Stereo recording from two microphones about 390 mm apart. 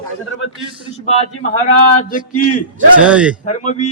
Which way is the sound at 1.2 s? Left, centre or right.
Centre.